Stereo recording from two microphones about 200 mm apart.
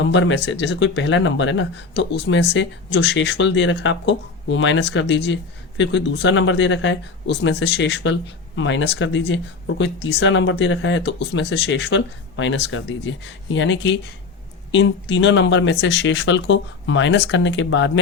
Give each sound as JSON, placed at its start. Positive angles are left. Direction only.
{"t": 0.0, "sound": "speech", "side_deg": 65}